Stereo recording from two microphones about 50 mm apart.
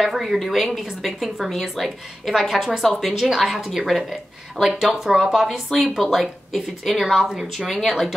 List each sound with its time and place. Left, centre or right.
0.0 s a woman's voice: centre